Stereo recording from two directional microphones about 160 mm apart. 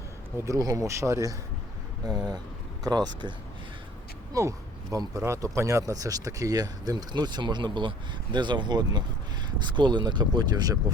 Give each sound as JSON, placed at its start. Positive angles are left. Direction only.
{"t": 0.4, "sound": "speech", "side_deg": -20}